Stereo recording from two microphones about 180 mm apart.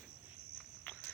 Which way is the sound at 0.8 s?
10° left (ahead or behind).